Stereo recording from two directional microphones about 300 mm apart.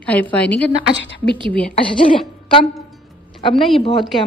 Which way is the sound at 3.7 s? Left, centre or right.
Centre.